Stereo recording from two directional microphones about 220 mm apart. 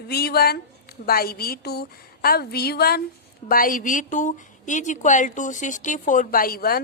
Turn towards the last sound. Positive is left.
turn(degrees=40)  # may be behind; listen again after turning